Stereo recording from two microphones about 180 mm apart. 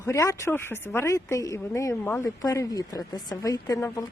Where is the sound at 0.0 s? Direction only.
15° left (ahead or behind).